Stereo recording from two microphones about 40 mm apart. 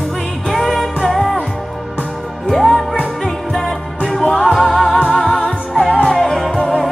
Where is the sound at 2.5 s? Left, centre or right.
Centre.